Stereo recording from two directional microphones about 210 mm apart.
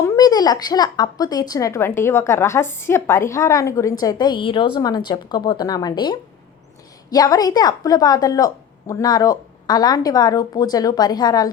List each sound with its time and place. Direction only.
0.0 s a woman's voice: 15° left (ahead or behind)